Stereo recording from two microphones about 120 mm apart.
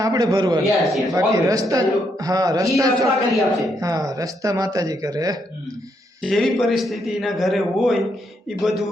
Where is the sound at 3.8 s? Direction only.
30° right (ahead or behind).